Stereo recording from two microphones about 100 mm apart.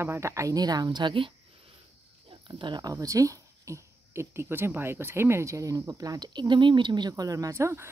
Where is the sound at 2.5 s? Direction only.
50° right (ahead or behind).